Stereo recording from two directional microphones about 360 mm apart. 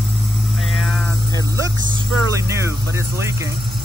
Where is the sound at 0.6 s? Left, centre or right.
Centre.